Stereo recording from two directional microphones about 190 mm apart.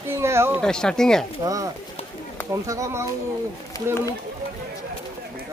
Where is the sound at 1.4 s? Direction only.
15° right (ahead or behind).